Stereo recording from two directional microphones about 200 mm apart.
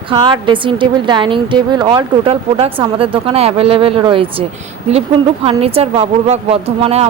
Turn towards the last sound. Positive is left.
turn(degrees=-30)  # may be behind; listen again after turning